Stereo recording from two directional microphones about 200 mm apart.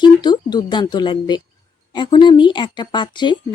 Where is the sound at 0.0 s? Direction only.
20° left (ahead or behind).